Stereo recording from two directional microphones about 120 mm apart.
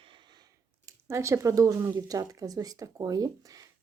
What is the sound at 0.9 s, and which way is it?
Speech, 25° right (ahead or behind).